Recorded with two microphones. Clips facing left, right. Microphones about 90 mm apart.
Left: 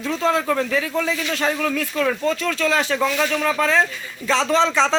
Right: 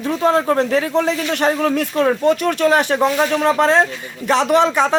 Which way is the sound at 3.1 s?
25° right (ahead or behind).